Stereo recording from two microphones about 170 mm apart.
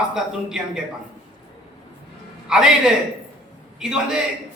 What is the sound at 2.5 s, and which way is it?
A man's voice, 5° right (ahead or behind).